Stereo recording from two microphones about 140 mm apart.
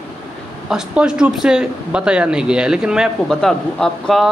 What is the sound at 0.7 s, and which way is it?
Speech, 5° right (ahead or behind).